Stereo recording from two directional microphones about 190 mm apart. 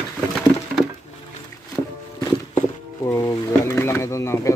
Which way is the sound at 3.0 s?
20° left (ahead or behind).